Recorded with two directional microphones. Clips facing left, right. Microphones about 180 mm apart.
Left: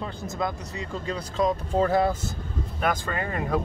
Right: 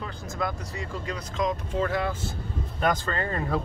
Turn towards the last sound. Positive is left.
turn(degrees=15)  # may be behind; listen again after turning